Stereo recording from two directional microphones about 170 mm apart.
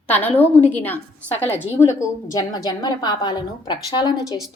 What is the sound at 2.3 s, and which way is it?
A woman's voice, 20° left (ahead or behind).